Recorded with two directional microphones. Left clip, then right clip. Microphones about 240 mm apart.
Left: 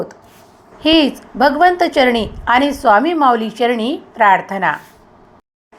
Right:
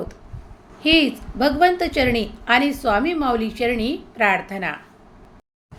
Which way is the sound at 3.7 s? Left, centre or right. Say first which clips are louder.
Left 5 dB; centre.